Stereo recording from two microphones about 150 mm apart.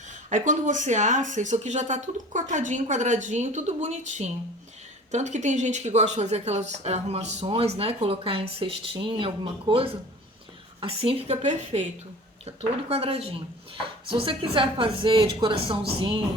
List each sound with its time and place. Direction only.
0.3 s a woman's voice: 55° right (ahead or behind)
12.9 s a woman's voice: 40° right (ahead or behind)